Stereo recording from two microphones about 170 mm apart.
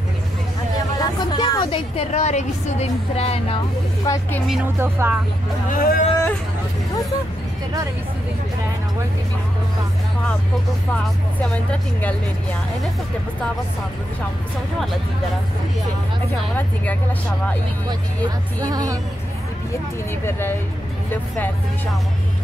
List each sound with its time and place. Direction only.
0.9 s a woman's voice: 25° left (ahead or behind)
4.0 s speech: 20° left (ahead or behind)
4.7 s speech: 10° right (ahead or behind)
5.7 s speech: 55° left (ahead or behind)
18.6 s a woman's voice: 20° right (ahead or behind)
20.2 s speech: 15° left (ahead or behind)